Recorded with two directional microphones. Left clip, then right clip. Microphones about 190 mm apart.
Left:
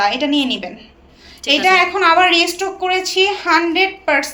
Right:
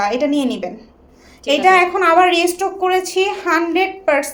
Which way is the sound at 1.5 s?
50° right (ahead or behind).